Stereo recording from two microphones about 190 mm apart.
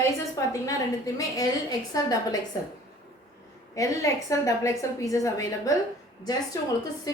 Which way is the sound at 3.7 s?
15° left (ahead or behind).